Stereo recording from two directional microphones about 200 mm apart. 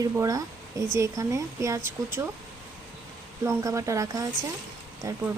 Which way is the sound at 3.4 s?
15° right (ahead or behind).